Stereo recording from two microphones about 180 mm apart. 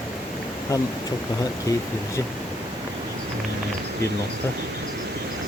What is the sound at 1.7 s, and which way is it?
Speech, 15° left (ahead or behind).